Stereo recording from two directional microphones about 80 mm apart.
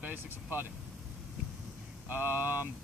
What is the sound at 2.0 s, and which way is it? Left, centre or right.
Speech, right.